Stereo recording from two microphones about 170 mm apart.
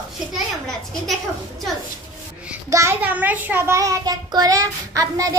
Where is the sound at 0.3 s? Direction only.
Centre (ahead or behind).